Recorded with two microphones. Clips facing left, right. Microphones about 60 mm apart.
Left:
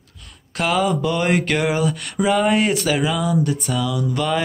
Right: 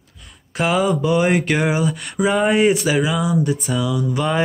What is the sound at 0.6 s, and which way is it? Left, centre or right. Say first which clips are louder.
Speech: right 1 dB; centre.